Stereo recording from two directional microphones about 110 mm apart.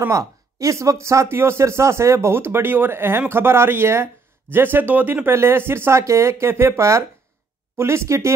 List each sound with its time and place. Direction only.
0.1 s speech: 30° right (ahead or behind)